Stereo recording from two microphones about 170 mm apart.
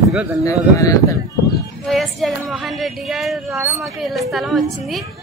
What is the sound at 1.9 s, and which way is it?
A woman's voice, centre (ahead or behind).